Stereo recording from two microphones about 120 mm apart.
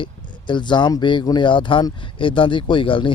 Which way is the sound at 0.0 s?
40° left (ahead or behind).